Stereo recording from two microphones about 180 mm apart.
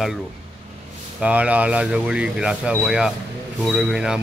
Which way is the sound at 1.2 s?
5° right (ahead or behind).